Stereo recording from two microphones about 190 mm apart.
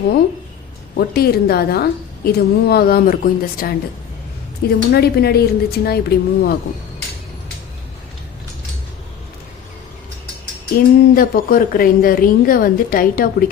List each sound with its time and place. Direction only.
0.9 s a woman's voice: 55° left (ahead or behind)
4.9 s a woman's voice: 55° left (ahead or behind)
10.8 s a woman's voice: 50° left (ahead or behind)